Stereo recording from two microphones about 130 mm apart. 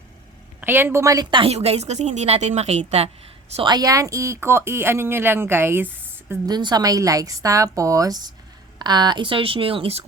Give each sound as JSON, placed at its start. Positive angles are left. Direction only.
{"t": 0.6, "sound": "a woman's voice", "side_deg": -15}
{"t": 1.3, "sound": "speech", "side_deg": -40}
{"t": 1.5, "sound": "a woman's voice", "side_deg": -55}
{"t": 3.6, "sound": "speech", "side_deg": -30}
{"t": 6.4, "sound": "speech", "side_deg": -35}